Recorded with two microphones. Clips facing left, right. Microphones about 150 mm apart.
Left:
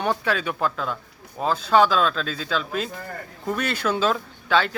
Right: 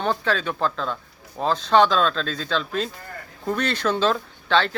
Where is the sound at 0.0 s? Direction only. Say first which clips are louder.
Even; 10° left (ahead or behind).